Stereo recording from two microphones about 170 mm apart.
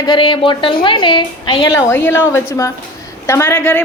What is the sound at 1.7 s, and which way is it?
A woman's voice, 15° left (ahead or behind).